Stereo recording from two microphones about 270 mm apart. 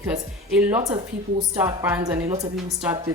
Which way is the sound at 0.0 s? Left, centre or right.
Centre.